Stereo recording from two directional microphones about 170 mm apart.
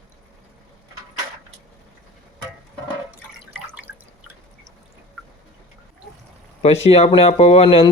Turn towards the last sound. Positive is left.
turn(degrees=35)  # may be behind; listen again after turning